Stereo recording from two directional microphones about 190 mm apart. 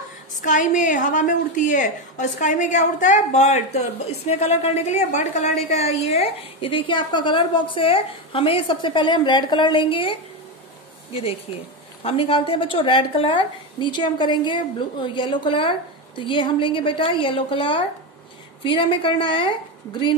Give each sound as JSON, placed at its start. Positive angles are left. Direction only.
{"t": 0.4, "sound": "a woman's voice", "side_deg": 40}
{"t": 12.0, "sound": "a woman's voice", "side_deg": 30}